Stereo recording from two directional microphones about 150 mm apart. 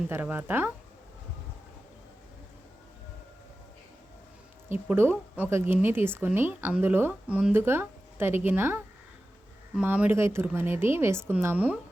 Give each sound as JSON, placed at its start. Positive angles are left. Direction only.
{"t": 0.1, "sound": "speech", "side_deg": -10}
{"t": 4.7, "sound": "speech", "side_deg": -15}